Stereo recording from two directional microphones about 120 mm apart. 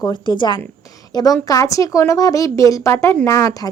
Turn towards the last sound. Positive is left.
turn(degrees=30)  # may be behind; listen again after turning